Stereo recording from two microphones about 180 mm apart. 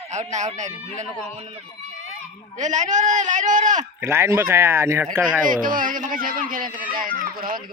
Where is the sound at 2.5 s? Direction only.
40° right (ahead or behind).